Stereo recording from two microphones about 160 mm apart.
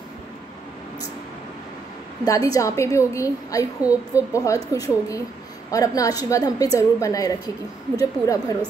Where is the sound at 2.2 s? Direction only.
20° left (ahead or behind).